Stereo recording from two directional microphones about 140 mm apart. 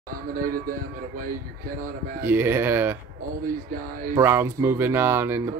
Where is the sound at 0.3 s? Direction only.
90° right.